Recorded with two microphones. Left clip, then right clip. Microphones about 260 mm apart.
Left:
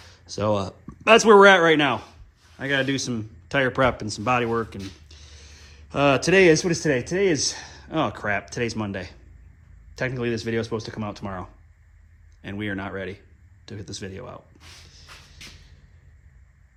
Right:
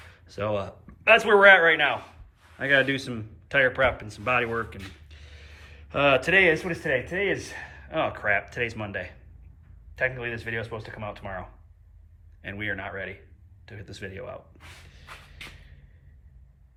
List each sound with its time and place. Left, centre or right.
0.1 s speech: centre
2.6 s speech: centre
14.9 s a sound: centre